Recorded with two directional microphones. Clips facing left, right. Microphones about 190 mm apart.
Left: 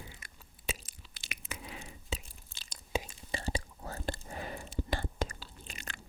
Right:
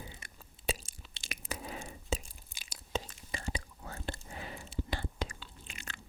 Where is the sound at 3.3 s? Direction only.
30° left (ahead or behind).